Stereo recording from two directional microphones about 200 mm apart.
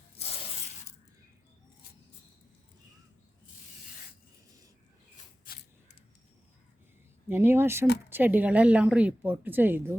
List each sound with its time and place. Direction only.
5.5 s scissors: 45° left (ahead or behind)
7.3 s a woman's voice: 10° right (ahead or behind)